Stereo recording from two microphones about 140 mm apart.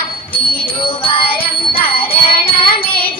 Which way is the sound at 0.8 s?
40° left (ahead or behind).